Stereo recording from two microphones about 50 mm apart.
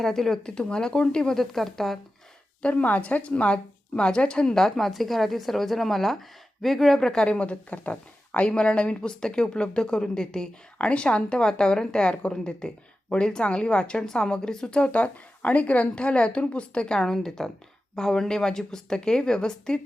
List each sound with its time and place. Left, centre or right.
0.0 s a woman's voice: centre
1.4 s speech: centre
2.6 s a woman's voice: left
7.3 s a woman's voice: left